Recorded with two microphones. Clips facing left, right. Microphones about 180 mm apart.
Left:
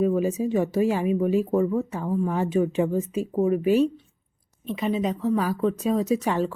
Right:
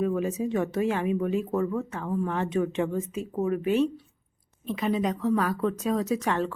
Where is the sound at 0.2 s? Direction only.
5° left (ahead or behind).